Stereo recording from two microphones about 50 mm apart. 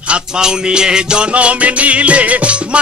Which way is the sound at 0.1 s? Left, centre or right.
Centre.